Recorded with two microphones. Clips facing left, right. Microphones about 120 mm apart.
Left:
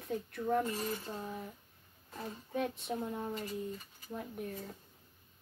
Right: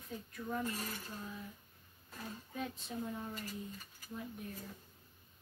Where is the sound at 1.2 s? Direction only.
65° left (ahead or behind).